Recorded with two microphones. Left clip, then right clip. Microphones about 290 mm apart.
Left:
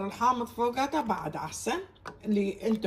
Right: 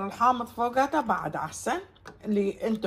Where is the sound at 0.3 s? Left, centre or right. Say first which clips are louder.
Right 2 dB; centre.